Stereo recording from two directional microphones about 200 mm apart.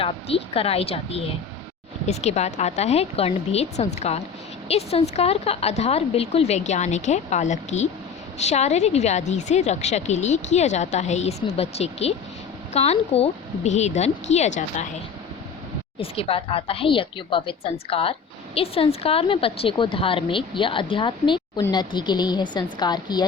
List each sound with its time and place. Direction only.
0.0 s a woman's voice: 30° left (ahead or behind)
16.0 s a woman's voice: 30° left (ahead or behind)